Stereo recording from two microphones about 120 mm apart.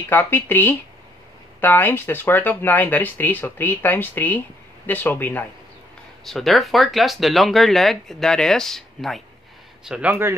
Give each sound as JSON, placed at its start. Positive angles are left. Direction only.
{"t": 0.1, "sound": "speech", "side_deg": 20}
{"t": 6.2, "sound": "speech", "side_deg": 0}
{"t": 9.8, "sound": "speech", "side_deg": -10}